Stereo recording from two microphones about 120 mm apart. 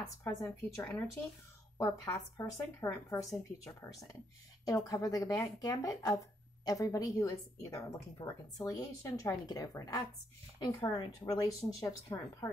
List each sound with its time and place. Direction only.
0.2 s speech: 25° left (ahead or behind)